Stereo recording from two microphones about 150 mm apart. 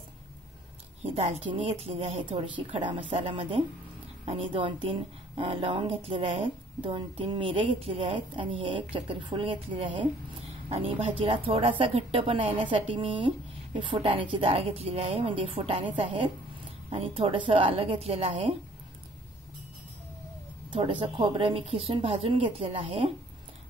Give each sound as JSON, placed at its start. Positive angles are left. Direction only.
{"t": 1.0, "sound": "a woman's voice", "side_deg": -40}
{"t": 20.7, "sound": "a woman's voice", "side_deg": -35}